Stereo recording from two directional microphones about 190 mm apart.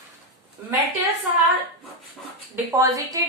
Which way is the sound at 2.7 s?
15° right (ahead or behind).